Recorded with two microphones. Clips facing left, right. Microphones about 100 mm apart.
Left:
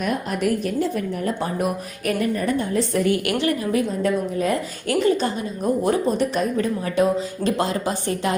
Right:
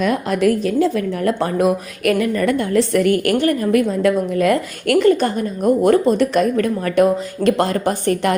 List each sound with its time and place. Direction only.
0.0 s speech: 90° right
2.0 s a woman's voice: 90° right; by 3.2 s 65° right (ahead or behind)
3.2 s a woman's voice: 45° right (ahead or behind)